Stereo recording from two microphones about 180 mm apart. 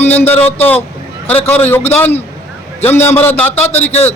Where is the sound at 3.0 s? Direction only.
35° left (ahead or behind).